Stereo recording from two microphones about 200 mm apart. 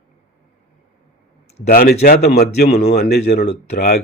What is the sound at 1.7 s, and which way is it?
Speech, 45° left (ahead or behind).